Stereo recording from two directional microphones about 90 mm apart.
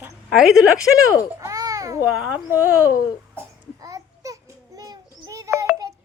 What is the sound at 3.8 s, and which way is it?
Babbling, 40° right (ahead or behind).